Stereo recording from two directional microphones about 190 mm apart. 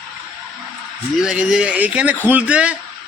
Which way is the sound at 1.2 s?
5° right (ahead or behind).